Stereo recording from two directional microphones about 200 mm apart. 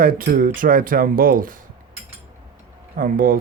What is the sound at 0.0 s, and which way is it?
Speech, 45° right (ahead or behind).